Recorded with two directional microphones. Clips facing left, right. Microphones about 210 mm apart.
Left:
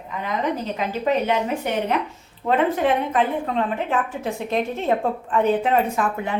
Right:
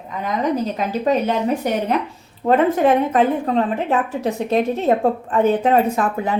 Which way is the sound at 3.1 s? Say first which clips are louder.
Right 5 dB; 40° right (ahead or behind).